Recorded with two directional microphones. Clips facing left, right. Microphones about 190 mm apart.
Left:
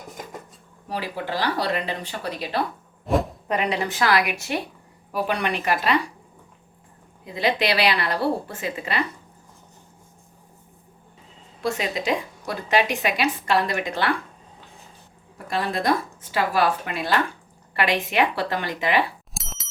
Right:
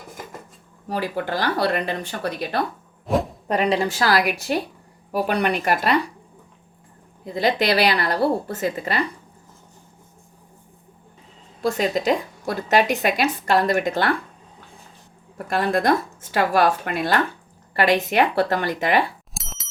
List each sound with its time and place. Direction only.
0.9 s a woman's voice: 50° right (ahead or behind)
3.1 s a sound: centre (ahead or behind)
3.5 s a woman's voice: 35° right (ahead or behind)
7.3 s a woman's voice: 40° right (ahead or behind)
11.6 s a woman's voice: 40° right (ahead or behind)
15.4 s a woman's voice: 55° right (ahead or behind)
19.3 s bicycle bell: centre (ahead or behind)